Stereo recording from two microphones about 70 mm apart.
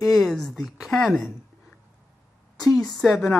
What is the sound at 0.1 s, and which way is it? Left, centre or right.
Speech, centre.